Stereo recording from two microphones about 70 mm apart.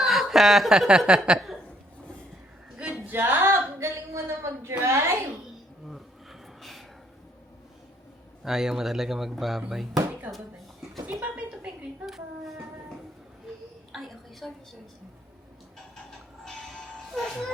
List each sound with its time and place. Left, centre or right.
0.0 s speech: centre
3.1 s a sound: right
3.8 s a woman's voice: right
6.6 s a sound: centre
8.4 s speech: centre
10.3 s a woman's voice: right
12.0 s speech: centre
13.9 s a sound: centre
16.4 s music: centre